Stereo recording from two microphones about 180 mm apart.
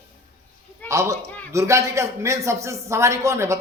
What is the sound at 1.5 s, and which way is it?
A man's voice, 15° right (ahead or behind).